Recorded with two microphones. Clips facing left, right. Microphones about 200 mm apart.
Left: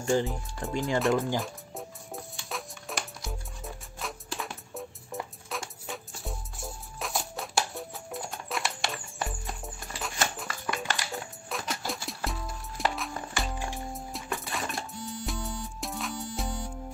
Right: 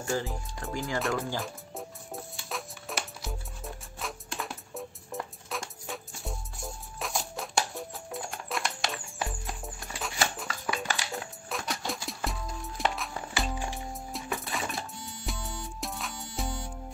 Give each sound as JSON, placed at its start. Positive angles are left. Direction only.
{"t": 0.0, "sound": "speech", "side_deg": 25}
{"t": 1.4, "sound": "music", "side_deg": 0}